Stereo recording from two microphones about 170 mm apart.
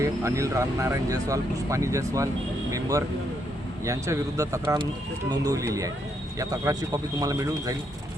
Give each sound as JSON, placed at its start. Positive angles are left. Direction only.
{"t": 0.0, "sound": "speech", "side_deg": -20}